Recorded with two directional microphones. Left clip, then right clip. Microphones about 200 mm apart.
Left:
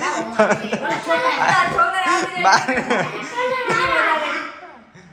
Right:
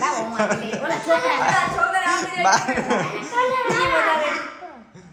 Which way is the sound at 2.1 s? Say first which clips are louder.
Left 3 dB; 15° right (ahead or behind).